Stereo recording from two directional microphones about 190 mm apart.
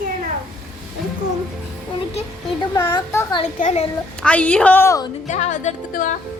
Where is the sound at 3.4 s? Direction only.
40° left (ahead or behind).